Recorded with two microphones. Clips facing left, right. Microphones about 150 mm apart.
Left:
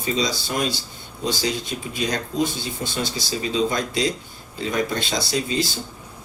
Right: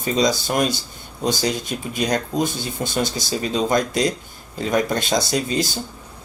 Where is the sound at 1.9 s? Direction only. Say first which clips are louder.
Right 4 dB; 45° right (ahead or behind).